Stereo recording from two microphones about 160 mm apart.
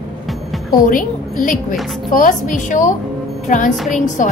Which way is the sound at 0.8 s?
55° left (ahead or behind).